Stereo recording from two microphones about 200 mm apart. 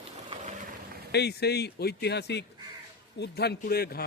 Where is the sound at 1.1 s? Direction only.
55° left (ahead or behind).